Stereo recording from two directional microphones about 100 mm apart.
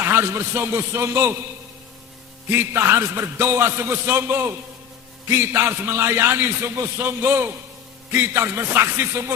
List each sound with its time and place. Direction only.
0.0 s a man's voice: 25° right (ahead or behind)
2.5 s a man's voice: 25° right (ahead or behind)